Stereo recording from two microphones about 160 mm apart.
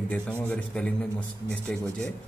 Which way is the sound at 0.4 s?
5° left (ahead or behind).